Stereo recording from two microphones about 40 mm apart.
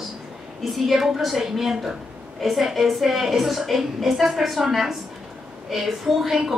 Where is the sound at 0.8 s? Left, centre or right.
Centre.